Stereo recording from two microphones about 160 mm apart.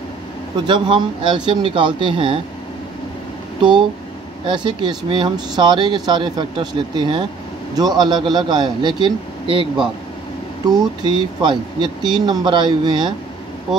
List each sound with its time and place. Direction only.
0.7 s speech: 30° right (ahead or behind)
4.5 s speech: 30° right (ahead or behind)